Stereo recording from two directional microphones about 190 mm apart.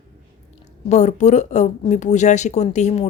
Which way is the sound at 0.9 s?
40° left (ahead or behind).